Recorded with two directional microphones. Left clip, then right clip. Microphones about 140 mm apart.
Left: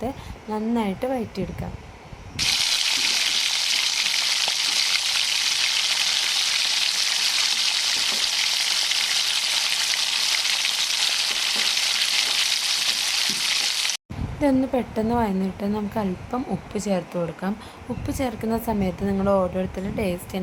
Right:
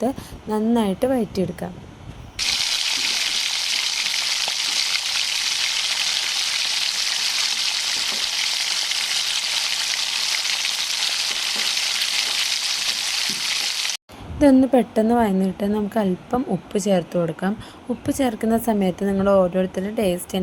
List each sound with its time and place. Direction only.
0.5 s speech: 45° right (ahead or behind)
2.4 s a sound: centre (ahead or behind)
14.4 s a woman's voice: 35° right (ahead or behind)